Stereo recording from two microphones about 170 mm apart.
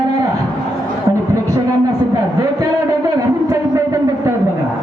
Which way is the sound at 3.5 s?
20° right (ahead or behind).